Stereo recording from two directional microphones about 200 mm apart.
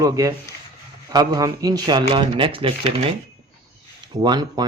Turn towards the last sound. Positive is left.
turn(degrees=-20)  # may be behind; listen again after turning